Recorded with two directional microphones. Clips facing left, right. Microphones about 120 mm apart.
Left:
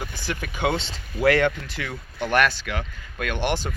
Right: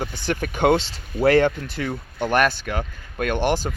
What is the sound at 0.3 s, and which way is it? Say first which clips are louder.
Speech: right 7 dB; 45° right (ahead or behind).